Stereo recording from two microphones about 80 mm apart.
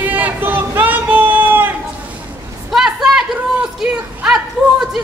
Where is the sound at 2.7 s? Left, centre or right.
Centre.